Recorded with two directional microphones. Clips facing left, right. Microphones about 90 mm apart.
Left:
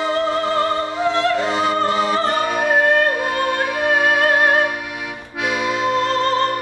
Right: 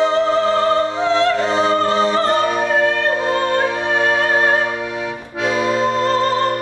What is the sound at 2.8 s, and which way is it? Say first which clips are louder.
Music: left 1 dB; 25° right (ahead or behind).